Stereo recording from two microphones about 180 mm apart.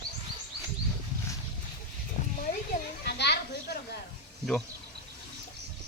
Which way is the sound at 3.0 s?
65° left (ahead or behind).